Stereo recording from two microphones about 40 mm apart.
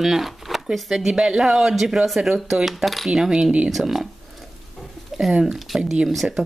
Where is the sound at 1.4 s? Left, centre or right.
Centre.